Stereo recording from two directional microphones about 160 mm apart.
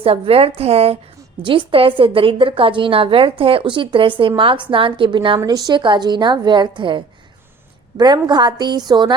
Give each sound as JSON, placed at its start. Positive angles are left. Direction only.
{"t": 0.0, "sound": "a woman's voice", "side_deg": -35}